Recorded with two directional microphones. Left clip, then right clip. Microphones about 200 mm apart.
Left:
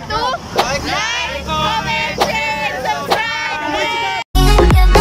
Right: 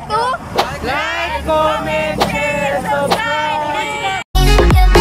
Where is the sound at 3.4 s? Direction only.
30° left (ahead or behind).